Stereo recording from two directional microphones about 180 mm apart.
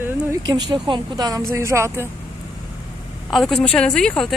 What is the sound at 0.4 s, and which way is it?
Speech, 25° right (ahead or behind).